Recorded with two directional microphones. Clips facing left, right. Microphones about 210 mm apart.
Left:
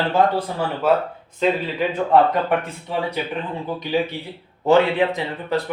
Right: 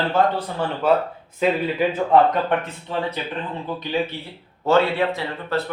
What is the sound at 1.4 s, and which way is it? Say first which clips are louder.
Speech: even; 10° right (ahead or behind).